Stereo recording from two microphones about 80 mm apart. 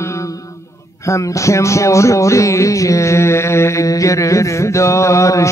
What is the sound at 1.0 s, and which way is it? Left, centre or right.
Speech, left.